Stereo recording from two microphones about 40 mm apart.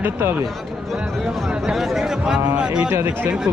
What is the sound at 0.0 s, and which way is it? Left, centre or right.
Speech, right.